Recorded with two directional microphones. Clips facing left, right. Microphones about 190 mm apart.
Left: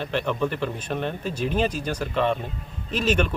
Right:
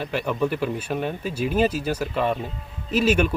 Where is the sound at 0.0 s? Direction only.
5° right (ahead or behind).